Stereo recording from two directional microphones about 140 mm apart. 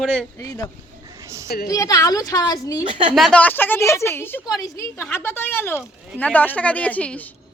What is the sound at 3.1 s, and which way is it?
A woman's voice, 5° left (ahead or behind).